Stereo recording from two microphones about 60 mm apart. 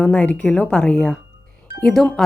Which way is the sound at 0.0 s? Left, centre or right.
Left.